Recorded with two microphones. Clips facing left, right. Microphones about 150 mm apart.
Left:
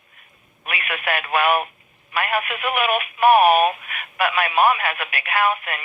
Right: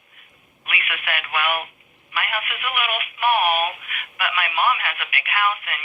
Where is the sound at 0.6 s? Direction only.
35° left (ahead or behind).